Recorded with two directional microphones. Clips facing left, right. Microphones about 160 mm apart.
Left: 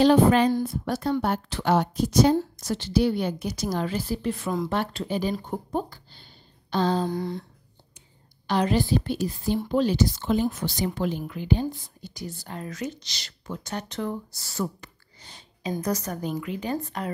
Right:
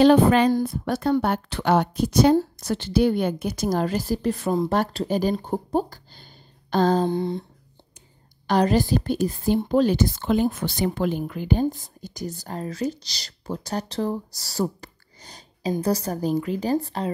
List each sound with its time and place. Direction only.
0.0 s a woman's voice: 65° right (ahead or behind); by 7.1 s 45° right (ahead or behind)
7.1 s humming: 25° right (ahead or behind)
8.5 s a woman's voice: 40° right (ahead or behind)